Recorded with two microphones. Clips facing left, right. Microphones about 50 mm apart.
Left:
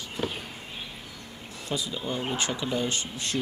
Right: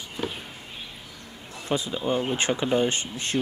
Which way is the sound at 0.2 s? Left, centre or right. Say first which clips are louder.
Even; centre.